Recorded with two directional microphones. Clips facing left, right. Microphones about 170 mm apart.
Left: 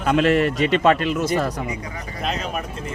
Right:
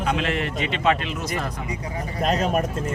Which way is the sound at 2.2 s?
45° right (ahead or behind).